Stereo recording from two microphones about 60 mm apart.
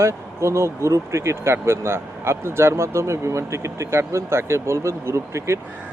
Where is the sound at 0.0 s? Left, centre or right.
Right.